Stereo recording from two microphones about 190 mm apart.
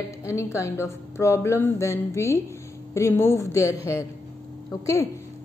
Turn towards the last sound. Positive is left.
turn(degrees=15)  # may be behind; listen again after turning